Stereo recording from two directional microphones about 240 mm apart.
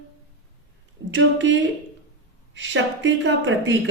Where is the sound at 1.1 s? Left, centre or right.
Right.